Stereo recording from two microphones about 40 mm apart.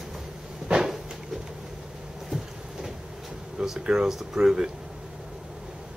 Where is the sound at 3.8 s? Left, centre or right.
Right.